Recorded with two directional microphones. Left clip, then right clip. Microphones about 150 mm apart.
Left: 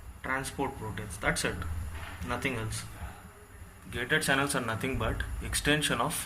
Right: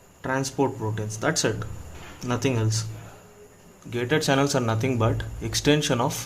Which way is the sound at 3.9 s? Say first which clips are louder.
Right 5 dB; 70° right (ahead or behind).